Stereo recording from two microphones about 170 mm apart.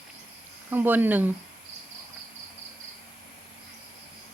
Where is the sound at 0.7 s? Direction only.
10° right (ahead or behind).